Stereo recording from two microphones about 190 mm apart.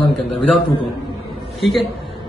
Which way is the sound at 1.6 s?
Centre (ahead or behind).